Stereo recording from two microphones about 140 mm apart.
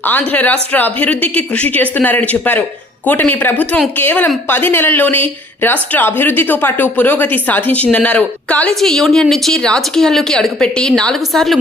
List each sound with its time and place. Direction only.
0.1 s speech: 10° left (ahead or behind)